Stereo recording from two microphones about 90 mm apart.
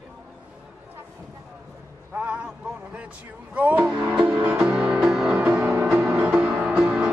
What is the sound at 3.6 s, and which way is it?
Music, 15° right (ahead or behind).